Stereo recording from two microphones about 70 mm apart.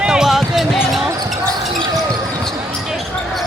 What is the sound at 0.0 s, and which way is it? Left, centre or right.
Basketball bounce, centre.